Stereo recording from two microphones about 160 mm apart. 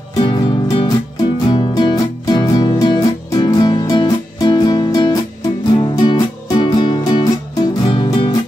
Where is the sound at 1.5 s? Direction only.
30° left (ahead or behind).